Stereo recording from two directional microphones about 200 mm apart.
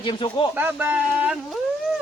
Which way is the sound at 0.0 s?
25° left (ahead or behind).